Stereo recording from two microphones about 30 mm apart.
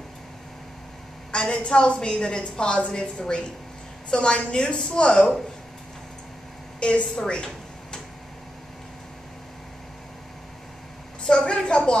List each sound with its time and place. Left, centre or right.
1.3 s a woman's voice: left
6.8 s a woman's voice: left
11.2 s a sound: left